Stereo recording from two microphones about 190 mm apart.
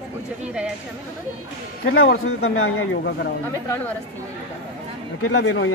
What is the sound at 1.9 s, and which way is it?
Speech, 90° left.